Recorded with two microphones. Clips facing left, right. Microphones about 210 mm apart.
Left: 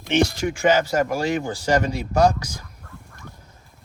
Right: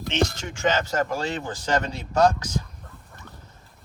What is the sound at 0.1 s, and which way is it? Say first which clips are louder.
Speech: left 6 dB; 10° left (ahead or behind).